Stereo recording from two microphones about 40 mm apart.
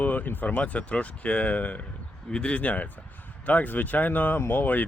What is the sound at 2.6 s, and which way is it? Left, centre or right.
Speech, left.